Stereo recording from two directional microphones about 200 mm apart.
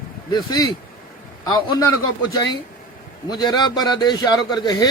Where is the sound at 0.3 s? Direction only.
20° left (ahead or behind).